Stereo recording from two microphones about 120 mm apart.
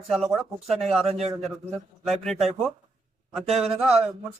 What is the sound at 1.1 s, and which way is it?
Speech, 60° right (ahead or behind).